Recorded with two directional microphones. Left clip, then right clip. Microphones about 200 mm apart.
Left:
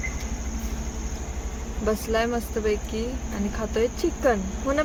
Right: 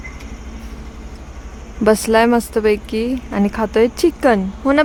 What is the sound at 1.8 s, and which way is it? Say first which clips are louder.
Speech: right 12 dB; 55° right (ahead or behind).